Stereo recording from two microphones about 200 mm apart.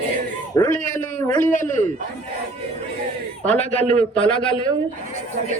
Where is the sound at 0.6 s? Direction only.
20° left (ahead or behind).